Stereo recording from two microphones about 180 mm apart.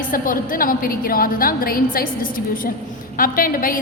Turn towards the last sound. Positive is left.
turn(degrees=50)  # may be behind; listen again after turning